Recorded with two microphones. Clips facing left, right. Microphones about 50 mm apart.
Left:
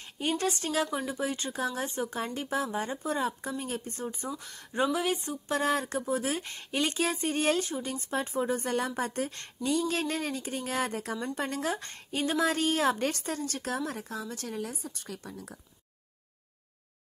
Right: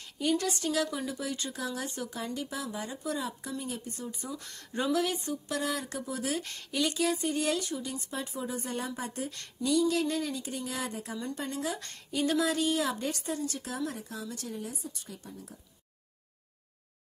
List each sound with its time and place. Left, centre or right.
0.0 s speech: left
4.3 s speech: centre
4.9 s speech: left
6.4 s speech: left
6.7 s speech: left
9.3 s speech: left
11.8 s a woman's voice: left
12.4 s speech: left
14.5 s speech: left
15.2 s speech: left